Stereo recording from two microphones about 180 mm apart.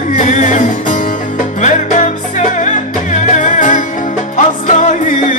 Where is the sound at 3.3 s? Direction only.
45° left (ahead or behind).